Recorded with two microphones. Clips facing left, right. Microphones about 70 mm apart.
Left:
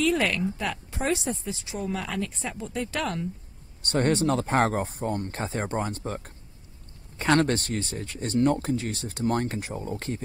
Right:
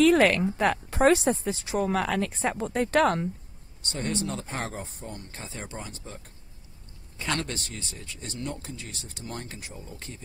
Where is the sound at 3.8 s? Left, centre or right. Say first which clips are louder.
Left 8 dB; left.